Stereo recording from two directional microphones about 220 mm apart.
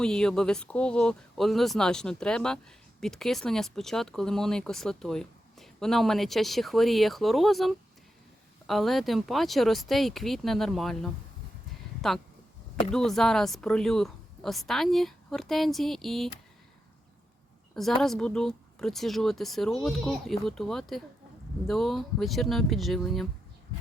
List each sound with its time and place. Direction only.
0.0 s speech: 5° left (ahead or behind)
12.9 s speech: centre (ahead or behind)
17.7 s speech: centre (ahead or behind)